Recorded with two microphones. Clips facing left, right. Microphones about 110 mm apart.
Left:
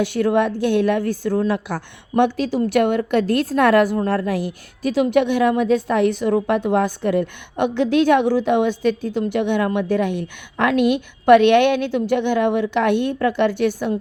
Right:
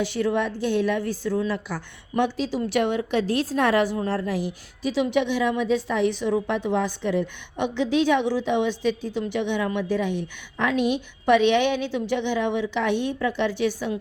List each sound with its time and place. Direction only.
0.0 s a woman's voice: 55° left (ahead or behind)